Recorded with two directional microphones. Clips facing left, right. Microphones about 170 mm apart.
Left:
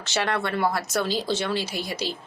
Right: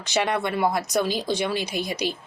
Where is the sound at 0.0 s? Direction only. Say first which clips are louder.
Right 2 dB; 15° right (ahead or behind).